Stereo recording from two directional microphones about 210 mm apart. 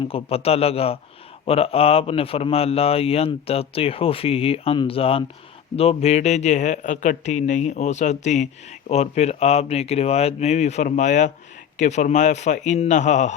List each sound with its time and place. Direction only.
0.1 s a man's voice: 25° left (ahead or behind)